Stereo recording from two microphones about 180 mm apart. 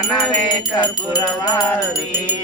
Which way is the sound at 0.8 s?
25° left (ahead or behind).